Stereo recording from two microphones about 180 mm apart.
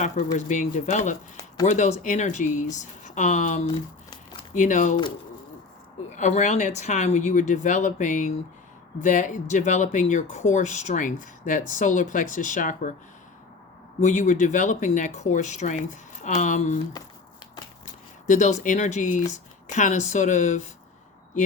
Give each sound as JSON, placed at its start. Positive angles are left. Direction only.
{"t": 0.3, "sound": "speech", "side_deg": 45}
{"t": 6.1, "sound": "speech", "side_deg": 40}
{"t": 14.0, "sound": "speech", "side_deg": 40}
{"t": 18.3, "sound": "speech", "side_deg": 45}